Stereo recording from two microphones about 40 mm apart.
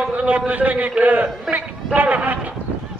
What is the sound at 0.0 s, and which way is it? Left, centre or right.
A man's voice, right.